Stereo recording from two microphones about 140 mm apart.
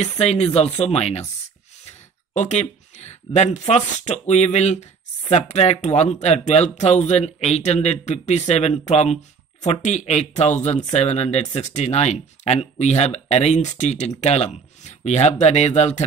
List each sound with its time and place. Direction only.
0.0 s speech: 50° left (ahead or behind)
2.3 s speech: 55° left (ahead or behind)